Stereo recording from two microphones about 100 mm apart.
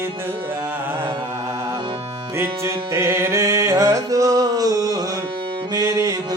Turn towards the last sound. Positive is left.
turn(degrees=-35)  # may be behind; listen again after turning